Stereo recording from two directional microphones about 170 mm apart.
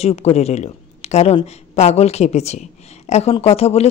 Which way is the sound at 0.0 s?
40° left (ahead or behind).